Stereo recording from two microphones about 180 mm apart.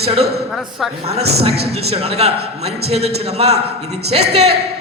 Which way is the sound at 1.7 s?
35° right (ahead or behind).